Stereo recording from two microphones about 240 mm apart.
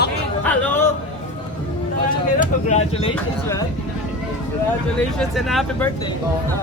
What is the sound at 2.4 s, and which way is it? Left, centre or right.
Speech, left.